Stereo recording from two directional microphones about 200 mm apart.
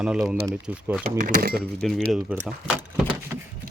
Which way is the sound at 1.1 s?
40° right (ahead or behind).